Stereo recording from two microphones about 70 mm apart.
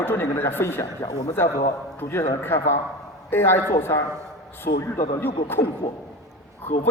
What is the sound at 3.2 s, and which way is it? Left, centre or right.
Speech, left.